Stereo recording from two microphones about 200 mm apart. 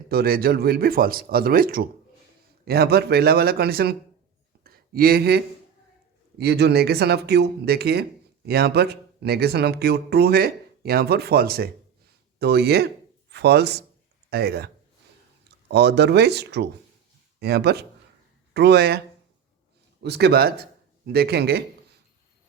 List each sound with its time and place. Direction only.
0.1 s speech: 50° right (ahead or behind)
4.6 s a sound: 50° right (ahead or behind)
6.4 s speech: 55° right (ahead or behind)